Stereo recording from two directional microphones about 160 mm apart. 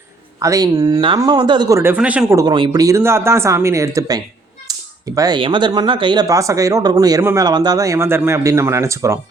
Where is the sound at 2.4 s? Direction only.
30° right (ahead or behind).